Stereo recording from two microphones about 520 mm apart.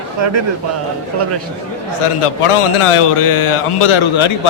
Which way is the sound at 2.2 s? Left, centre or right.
Left.